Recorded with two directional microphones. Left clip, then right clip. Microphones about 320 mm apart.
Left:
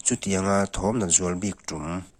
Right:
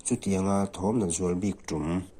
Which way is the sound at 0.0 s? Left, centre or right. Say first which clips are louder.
Left 4 dB; left.